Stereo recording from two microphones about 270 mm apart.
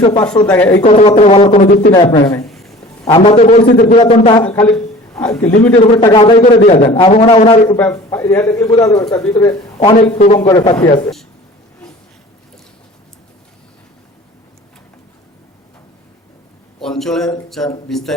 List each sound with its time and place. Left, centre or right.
0.0 s a man's voice: left
0.4 s a man's voice: centre
0.8 s a man's voice: left
1.9 s a man's voice: centre
2.5 s a sound: centre
3.1 s a man's voice: centre
4.7 s a man's voice: centre
5.8 s a man's voice: centre
7.8 s a man's voice: centre
9.7 s a man's voice: left
11.0 s speech: centre
16.8 s a man's voice: centre